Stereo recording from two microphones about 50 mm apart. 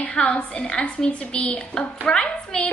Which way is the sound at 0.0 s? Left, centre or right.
Left.